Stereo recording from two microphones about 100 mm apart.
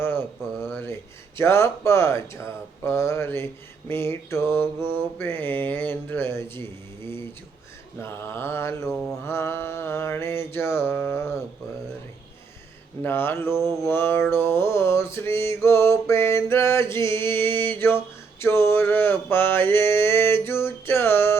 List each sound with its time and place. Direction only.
0.0 s mantra: 20° left (ahead or behind)
1.4 s speech: 25° left (ahead or behind)
8.0 s speech: 25° left (ahead or behind)
8.9 s mantra: 5° left (ahead or behind)
9.2 s speech: 25° left (ahead or behind)
13.1 s a sound: 25° left (ahead or behind)